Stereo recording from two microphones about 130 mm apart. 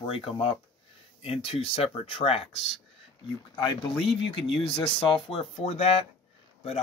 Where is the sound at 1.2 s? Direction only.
50° left (ahead or behind).